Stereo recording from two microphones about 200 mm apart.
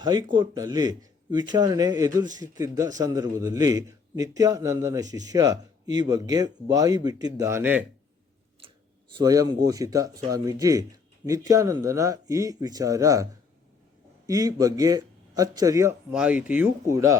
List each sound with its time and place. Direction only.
0.0 s speech: 20° right (ahead or behind)
9.2 s speech: 20° right (ahead or behind)
14.3 s speech: 20° right (ahead or behind)